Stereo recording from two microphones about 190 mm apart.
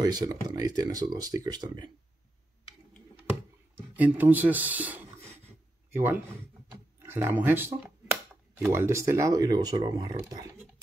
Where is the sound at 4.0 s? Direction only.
10° right (ahead or behind).